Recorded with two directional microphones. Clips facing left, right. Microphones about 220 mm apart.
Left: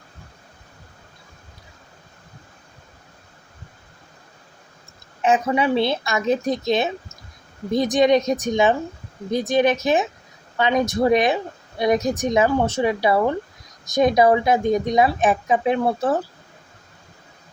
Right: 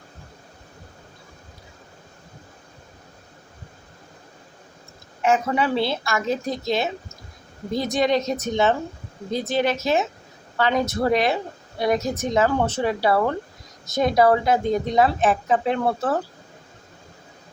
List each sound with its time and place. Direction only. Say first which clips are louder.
5.2 s a woman's voice: left 2 dB; 20° left (ahead or behind)